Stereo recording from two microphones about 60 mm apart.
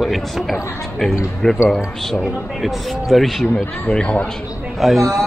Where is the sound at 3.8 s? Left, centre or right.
Left.